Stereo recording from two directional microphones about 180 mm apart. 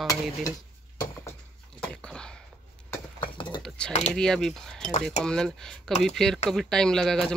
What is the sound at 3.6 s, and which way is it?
Typing, 5° left (ahead or behind).